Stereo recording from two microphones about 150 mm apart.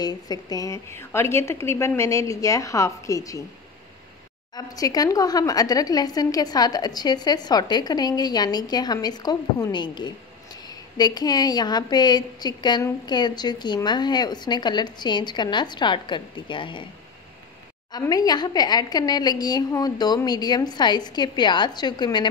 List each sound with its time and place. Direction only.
0.0 s speech: 25° left (ahead or behind)
4.6 s speech: 25° left (ahead or behind)
17.9 s speech: 25° left (ahead or behind)